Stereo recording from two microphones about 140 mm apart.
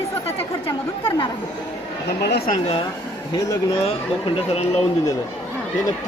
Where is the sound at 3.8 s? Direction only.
45° left (ahead or behind).